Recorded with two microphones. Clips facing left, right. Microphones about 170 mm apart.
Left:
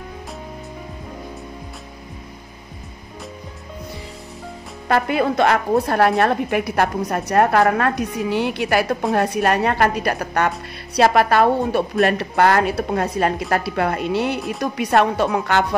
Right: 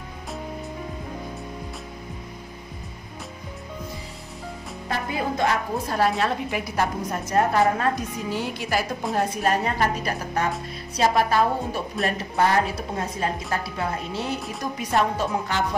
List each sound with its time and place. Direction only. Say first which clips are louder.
4.8 s a woman's voice: left 9 dB; 75° left (ahead or behind)